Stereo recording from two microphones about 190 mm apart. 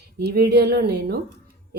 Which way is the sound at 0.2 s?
60° right (ahead or behind).